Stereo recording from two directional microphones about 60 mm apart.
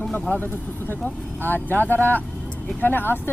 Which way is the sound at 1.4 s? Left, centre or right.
Left.